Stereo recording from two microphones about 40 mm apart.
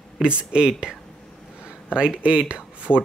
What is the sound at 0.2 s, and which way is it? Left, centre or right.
Speech, right.